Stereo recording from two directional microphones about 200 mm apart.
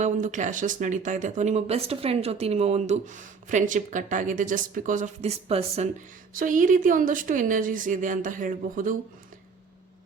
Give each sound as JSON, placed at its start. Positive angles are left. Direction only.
{"t": 0.0, "sound": "speech", "side_deg": -40}
{"t": 6.3, "sound": "speech", "side_deg": -40}